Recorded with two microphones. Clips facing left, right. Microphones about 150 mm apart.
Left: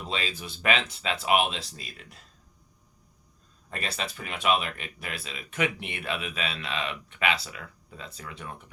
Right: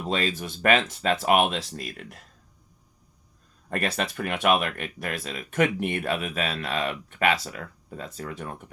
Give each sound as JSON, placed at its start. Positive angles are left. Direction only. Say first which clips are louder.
{"t": 0.0, "sound": "speech", "louder": "right 6 dB", "side_deg": -50}
{"t": 3.7, "sound": "speech", "louder": "right 7 dB", "side_deg": -55}